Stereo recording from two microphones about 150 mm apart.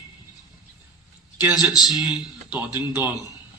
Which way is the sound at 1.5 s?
Centre (ahead or behind).